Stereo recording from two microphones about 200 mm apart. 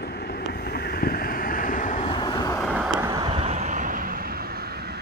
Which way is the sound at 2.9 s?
15° right (ahead or behind).